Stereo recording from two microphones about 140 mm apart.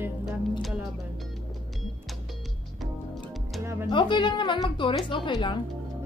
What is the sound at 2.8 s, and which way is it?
Music, centre (ahead or behind).